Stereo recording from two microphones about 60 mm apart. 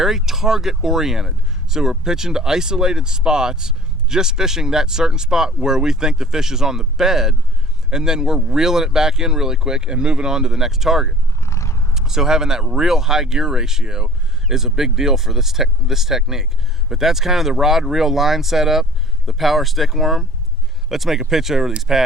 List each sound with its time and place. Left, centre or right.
0.0 s speech: centre
11.4 s a sound: left
11.9 s speech: centre